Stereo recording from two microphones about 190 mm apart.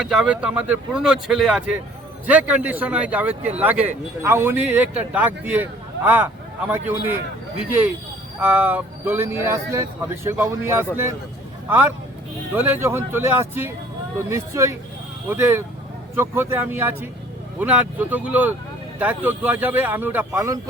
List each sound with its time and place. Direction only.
0.0 s speech: centre (ahead or behind)
12.5 s speech: 10° right (ahead or behind)